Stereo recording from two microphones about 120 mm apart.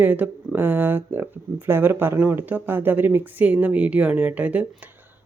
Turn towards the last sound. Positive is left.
turn(degrees=-10)  # may be behind; listen again after turning